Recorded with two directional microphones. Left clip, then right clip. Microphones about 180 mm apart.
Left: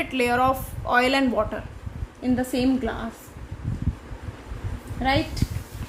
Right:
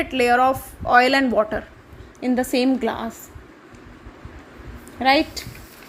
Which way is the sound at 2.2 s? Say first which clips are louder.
Right 4 dB; 45° right (ahead or behind).